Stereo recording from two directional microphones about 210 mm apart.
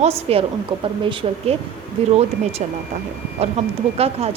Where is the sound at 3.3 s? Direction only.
30° right (ahead or behind).